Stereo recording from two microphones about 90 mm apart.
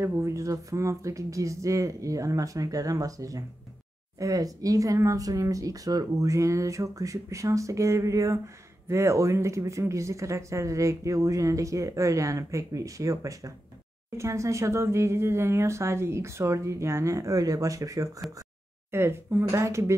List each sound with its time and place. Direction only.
0.0 s speech: 35° right (ahead or behind)
18.9 s speech: 25° right (ahead or behind)